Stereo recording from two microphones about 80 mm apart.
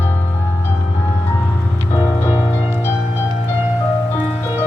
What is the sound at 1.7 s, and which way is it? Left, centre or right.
Music, left.